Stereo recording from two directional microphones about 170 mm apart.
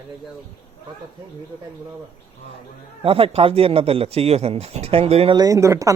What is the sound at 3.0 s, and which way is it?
Speech, 35° right (ahead or behind).